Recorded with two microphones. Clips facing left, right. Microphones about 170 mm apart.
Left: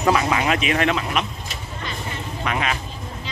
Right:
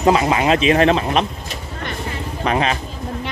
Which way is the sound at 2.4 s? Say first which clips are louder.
Right 6 dB; 30° right (ahead or behind).